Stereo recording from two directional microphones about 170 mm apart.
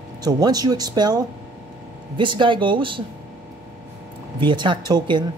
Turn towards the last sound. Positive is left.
turn(degrees=-25)  # may be behind; listen again after turning